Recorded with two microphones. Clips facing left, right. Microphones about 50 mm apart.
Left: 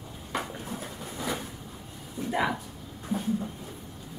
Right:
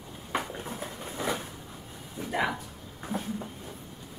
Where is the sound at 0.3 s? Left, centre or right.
Right.